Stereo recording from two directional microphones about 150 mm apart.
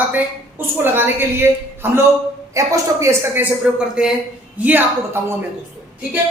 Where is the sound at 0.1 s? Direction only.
10° right (ahead or behind).